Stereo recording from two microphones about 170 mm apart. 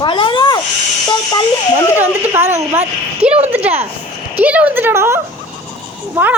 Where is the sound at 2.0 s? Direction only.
10° right (ahead or behind).